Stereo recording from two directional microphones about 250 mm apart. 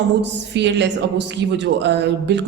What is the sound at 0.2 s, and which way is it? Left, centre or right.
Speech, right.